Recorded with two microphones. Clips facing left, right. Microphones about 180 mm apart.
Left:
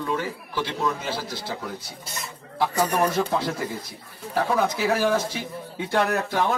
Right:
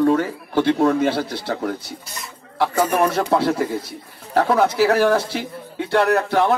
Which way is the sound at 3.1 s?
65° right (ahead or behind).